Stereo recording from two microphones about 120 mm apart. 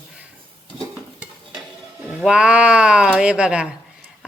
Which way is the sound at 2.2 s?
10° right (ahead or behind).